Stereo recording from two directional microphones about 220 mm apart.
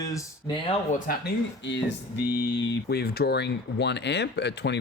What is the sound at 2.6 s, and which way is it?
Speech, 45° left (ahead or behind).